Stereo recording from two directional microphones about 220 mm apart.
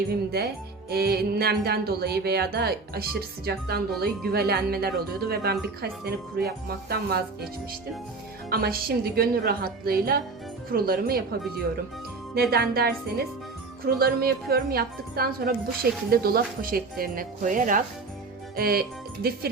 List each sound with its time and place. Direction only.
0.3 s a woman's voice: 45° right (ahead or behind)
8.4 s a woman's voice: 45° right (ahead or behind)
12.3 s a woman's voice: 45° right (ahead or behind)